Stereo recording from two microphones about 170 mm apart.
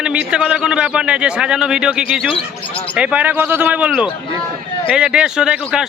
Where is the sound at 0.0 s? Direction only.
5° right (ahead or behind).